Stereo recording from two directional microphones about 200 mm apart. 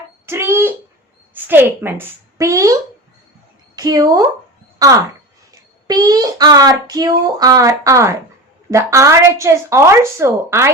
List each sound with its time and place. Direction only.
0.3 s a sound: 10° right (ahead or behind)
1.5 s a woman's voice: 10° right (ahead or behind)
3.8 s a child's voice: 20° right (ahead or behind)